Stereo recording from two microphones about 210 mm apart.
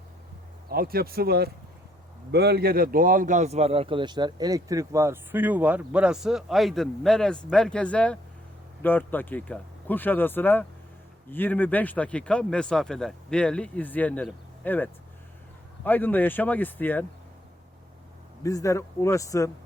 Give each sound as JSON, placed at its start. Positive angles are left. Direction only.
{"t": 0.7, "sound": "a man's voice", "side_deg": -45}
{"t": 18.4, "sound": "speech", "side_deg": 15}